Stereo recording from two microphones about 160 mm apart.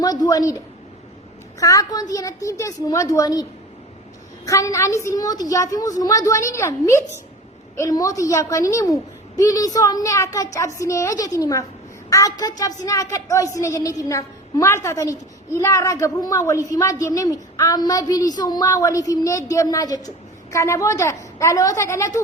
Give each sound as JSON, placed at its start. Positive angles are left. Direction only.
{"t": 0.0, "sound": "a sound", "side_deg": 25}
{"t": 1.5, "sound": "a woman's voice", "side_deg": 20}
{"t": 4.4, "sound": "a woman's voice", "side_deg": 20}